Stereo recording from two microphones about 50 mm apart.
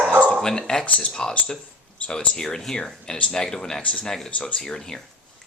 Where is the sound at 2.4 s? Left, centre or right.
Centre.